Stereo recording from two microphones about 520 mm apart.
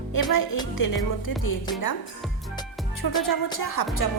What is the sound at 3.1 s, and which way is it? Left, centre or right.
Music, left.